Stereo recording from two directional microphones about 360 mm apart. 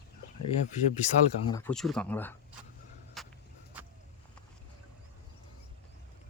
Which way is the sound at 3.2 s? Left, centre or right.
Centre.